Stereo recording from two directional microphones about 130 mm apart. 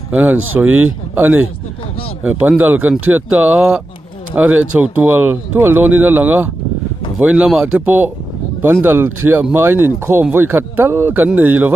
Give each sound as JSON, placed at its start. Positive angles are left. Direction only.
{"t": 0.1, "sound": "speech", "side_deg": -10}